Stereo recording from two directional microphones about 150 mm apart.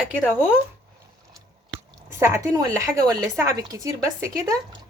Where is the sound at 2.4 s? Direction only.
25° right (ahead or behind).